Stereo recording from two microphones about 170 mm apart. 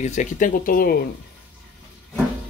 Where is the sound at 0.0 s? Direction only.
45° left (ahead or behind).